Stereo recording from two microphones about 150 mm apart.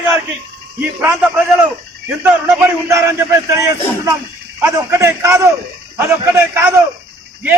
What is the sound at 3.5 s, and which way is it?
A man's voice, 20° right (ahead or behind).